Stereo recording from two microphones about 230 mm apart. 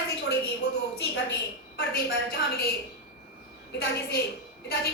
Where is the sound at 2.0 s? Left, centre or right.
Left.